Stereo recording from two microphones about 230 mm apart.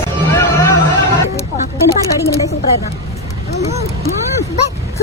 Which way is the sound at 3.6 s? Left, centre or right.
Left.